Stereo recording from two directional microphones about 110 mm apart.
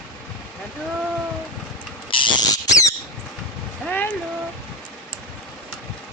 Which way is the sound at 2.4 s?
35° left (ahead or behind).